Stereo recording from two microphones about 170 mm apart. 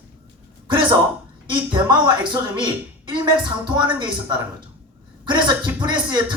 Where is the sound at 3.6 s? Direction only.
25° right (ahead or behind).